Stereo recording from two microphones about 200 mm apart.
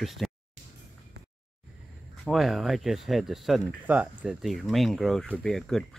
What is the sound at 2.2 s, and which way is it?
Speech, centre (ahead or behind).